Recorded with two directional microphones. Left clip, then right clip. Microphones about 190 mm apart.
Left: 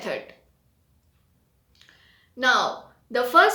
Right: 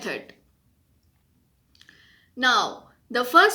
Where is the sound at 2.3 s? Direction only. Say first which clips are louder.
Even; 20° right (ahead or behind).